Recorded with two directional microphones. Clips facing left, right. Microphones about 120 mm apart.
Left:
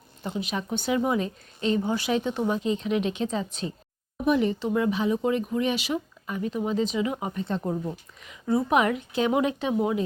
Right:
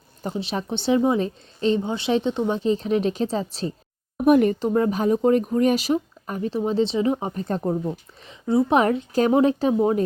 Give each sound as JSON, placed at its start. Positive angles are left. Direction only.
{"t": 0.2, "sound": "a woman's voice", "side_deg": -35}
{"t": 4.3, "sound": "speech", "side_deg": -55}
{"t": 4.7, "sound": "speech", "side_deg": -40}
{"t": 7.4, "sound": "speech", "side_deg": -45}
{"t": 7.7, "sound": "a woman's voice", "side_deg": -30}